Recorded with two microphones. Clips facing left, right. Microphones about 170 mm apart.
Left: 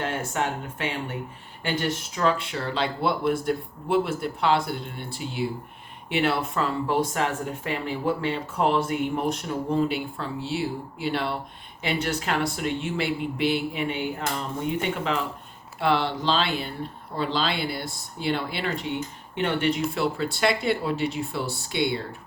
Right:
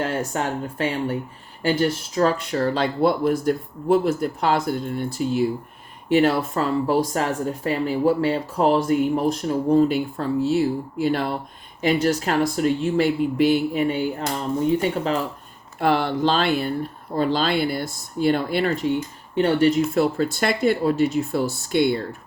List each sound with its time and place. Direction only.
0.0 s speech: 40° right (ahead or behind)
15.8 s speech: 50° right (ahead or behind)